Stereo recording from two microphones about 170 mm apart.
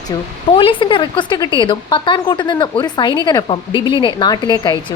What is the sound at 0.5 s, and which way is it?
Speech, 30° left (ahead or behind).